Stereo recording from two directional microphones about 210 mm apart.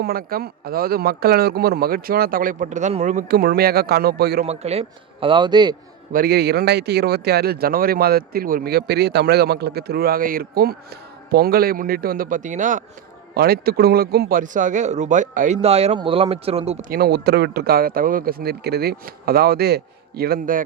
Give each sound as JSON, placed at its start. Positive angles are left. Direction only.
{"t": 0.0, "sound": "speech", "side_deg": -45}
{"t": 4.4, "sound": "a man's voice", "side_deg": -30}
{"t": 6.1, "sound": "speech", "side_deg": -50}
{"t": 13.3, "sound": "a man's voice", "side_deg": -45}
{"t": 16.9, "sound": "speech", "side_deg": -50}